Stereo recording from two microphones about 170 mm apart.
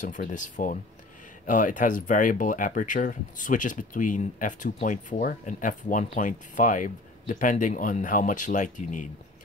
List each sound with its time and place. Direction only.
0.0 s speech: 50° left (ahead or behind)